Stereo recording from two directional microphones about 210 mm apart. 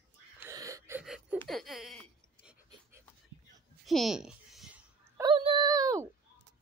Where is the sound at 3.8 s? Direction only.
Centre (ahead or behind).